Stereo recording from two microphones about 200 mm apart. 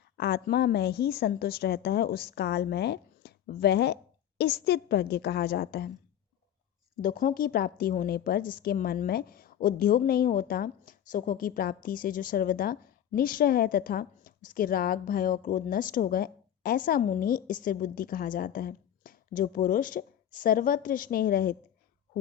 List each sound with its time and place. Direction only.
0.2 s a woman's voice: 50° left (ahead or behind)
7.0 s a woman's voice: 45° left (ahead or behind)